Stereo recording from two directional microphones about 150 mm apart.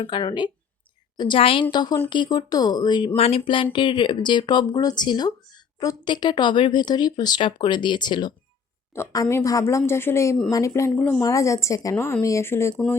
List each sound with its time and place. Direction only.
0.0 s speech: 30° left (ahead or behind)
3.2 s speech: 40° left (ahead or behind)
9.3 s speech: 20° left (ahead or behind)
11.2 s speech: 20° left (ahead or behind)